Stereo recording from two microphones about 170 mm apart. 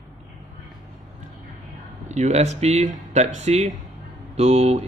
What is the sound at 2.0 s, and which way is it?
Speech, 40° right (ahead or behind).